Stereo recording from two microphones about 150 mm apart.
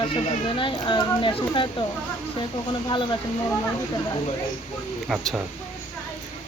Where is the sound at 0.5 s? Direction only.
35° left (ahead or behind).